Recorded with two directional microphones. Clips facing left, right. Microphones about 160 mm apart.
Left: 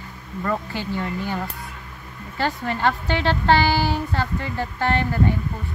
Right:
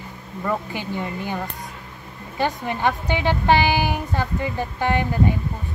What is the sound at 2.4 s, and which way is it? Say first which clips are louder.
A woman's voice: right 1 dB; 15° right (ahead or behind).